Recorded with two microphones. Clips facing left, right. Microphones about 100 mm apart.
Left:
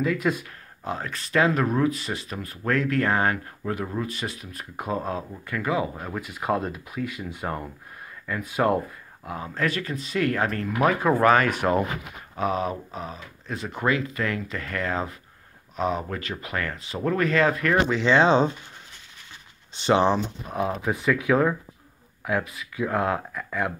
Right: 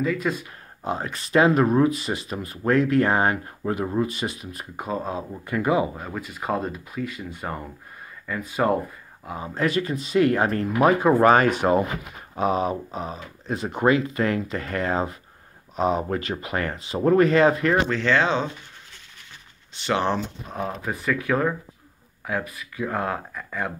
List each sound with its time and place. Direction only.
0.0 s speech: 5° left (ahead or behind)
0.8 s speech: 20° right (ahead or behind)
4.7 s speech: centre (ahead or behind)
5.3 s speech: 20° right (ahead or behind)
5.9 s speech: centre (ahead or behind)
9.4 s speech: 15° right (ahead or behind)
17.8 s speech: 15° left (ahead or behind)
19.7 s speech: 25° left (ahead or behind)
20.4 s speech: 5° left (ahead or behind)